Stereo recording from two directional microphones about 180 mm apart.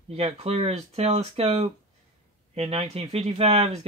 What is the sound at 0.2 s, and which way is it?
Speech, 35° right (ahead or behind).